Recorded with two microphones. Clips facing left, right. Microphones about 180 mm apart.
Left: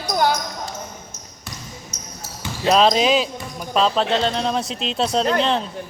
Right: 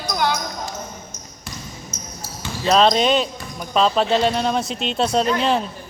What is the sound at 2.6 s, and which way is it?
Speech, 5° left (ahead or behind).